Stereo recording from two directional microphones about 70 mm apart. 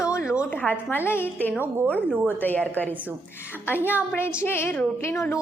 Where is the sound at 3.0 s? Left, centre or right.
Right.